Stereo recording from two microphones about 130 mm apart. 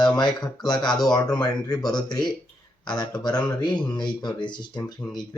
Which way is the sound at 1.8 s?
5° left (ahead or behind).